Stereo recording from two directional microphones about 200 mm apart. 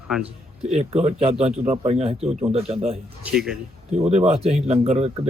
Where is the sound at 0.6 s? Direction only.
30° right (ahead or behind).